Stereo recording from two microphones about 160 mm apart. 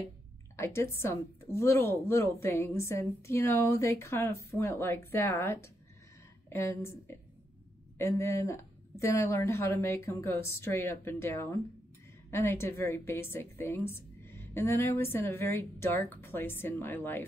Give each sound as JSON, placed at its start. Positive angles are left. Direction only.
{"t": 0.6, "sound": "a woman's voice", "side_deg": 15}